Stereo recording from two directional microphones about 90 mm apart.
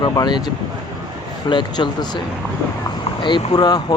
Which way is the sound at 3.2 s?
55° left (ahead or behind).